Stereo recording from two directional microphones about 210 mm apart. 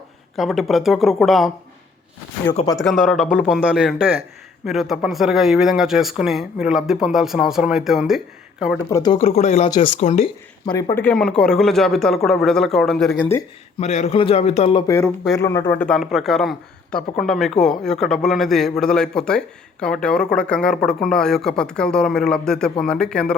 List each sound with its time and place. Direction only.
0.3 s speech: centre (ahead or behind)
2.5 s a man's voice: 20° left (ahead or behind)
2.7 s speech: centre (ahead or behind)
4.6 s speech: centre (ahead or behind)
8.9 s speech: 15° left (ahead or behind)
9.1 s a man's voice: 30° left (ahead or behind)
9.6 s a man's voice: 20° left (ahead or behind)
10.0 s speech: 30° left (ahead or behind)
10.7 s speech: 15° left (ahead or behind)
13.7 s a man's voice: 35° left (ahead or behind)
14.9 s speech: centre (ahead or behind)
15.4 s speech: 15° left (ahead or behind)